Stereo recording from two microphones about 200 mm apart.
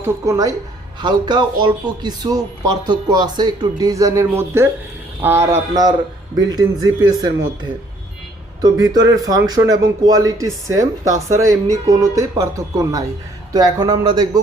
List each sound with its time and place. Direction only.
0.0 s speech: 15° right (ahead or behind)
8.6 s speech: 20° right (ahead or behind)